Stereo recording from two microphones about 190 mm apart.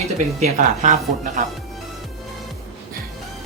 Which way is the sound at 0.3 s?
40° right (ahead or behind).